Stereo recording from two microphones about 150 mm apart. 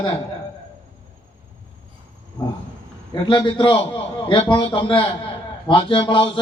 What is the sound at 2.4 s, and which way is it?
A man's voice, 25° left (ahead or behind).